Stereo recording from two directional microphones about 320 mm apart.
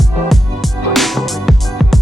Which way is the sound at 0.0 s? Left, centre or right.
Centre.